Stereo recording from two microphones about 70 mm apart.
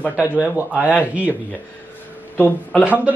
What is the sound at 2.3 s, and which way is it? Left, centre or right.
Speech, left.